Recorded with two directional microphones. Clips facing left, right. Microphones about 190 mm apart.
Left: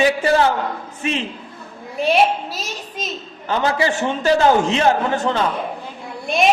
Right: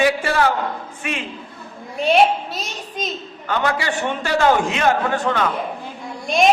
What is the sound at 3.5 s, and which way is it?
A man's voice, 30° left (ahead or behind).